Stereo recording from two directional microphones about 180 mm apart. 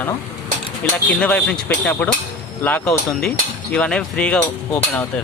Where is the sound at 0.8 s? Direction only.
10° left (ahead or behind).